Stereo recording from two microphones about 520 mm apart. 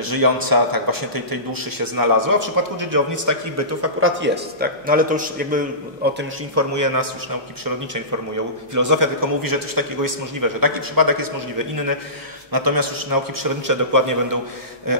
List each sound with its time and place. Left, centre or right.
0.0 s a man's voice: right; by 5.6 s centre
6.1 s a man's voice: right
8.7 s a man's voice: right